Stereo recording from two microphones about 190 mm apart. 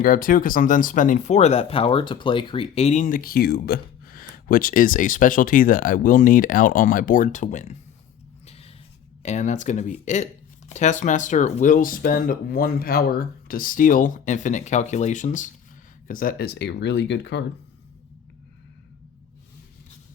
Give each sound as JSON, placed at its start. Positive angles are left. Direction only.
{"t": 0.0, "sound": "speech", "side_deg": 50}
{"t": 8.4, "sound": "a sound", "side_deg": 30}
{"t": 9.2, "sound": "speech", "side_deg": 35}